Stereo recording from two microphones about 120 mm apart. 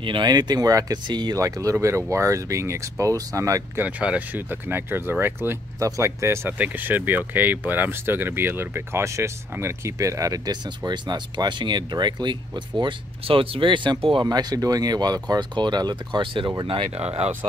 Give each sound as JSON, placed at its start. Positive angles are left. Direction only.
{"t": 0.0, "sound": "speech", "side_deg": -40}
{"t": 3.8, "sound": "speech", "side_deg": -10}